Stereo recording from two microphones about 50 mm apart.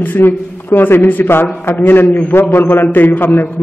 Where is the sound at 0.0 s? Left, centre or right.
Left.